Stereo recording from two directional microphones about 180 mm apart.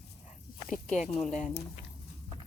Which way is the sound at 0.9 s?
40° left (ahead or behind).